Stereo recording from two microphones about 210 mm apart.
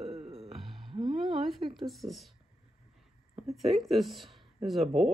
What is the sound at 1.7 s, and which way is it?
Speech, centre (ahead or behind).